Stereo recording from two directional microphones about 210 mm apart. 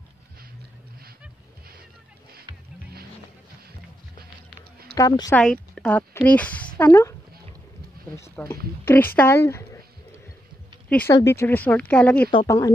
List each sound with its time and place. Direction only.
4.9 s speech: 15° left (ahead or behind)
5.4 s speech: 5° left (ahead or behind)
8.2 s speech: 15° left (ahead or behind)
10.9 s speech: 5° left (ahead or behind)
12.3 s speech: 20° left (ahead or behind)